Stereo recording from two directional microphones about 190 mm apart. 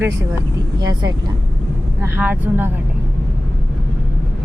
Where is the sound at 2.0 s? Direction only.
10° right (ahead or behind).